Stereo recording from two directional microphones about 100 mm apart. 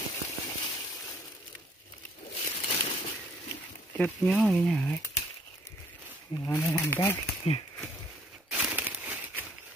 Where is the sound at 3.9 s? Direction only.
15° left (ahead or behind).